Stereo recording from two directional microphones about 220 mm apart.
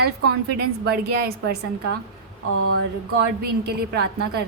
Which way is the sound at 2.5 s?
75° right (ahead or behind).